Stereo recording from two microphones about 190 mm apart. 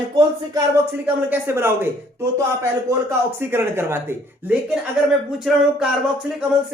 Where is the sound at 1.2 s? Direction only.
10° right (ahead or behind).